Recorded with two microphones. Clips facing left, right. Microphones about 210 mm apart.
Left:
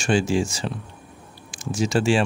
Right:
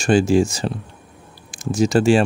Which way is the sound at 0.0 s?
40° right (ahead or behind).